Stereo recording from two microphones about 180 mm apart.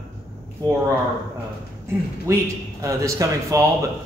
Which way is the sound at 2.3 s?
15° right (ahead or behind).